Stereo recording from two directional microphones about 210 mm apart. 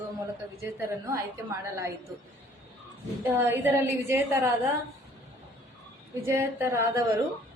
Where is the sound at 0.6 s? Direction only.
15° right (ahead or behind).